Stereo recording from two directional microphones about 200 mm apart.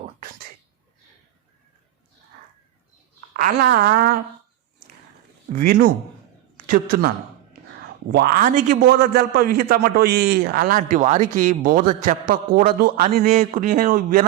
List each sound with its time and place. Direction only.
3.3 s a man's voice: 45° right (ahead or behind)
5.5 s a man's voice: 45° right (ahead or behind)
8.1 s a man's voice: 45° right (ahead or behind)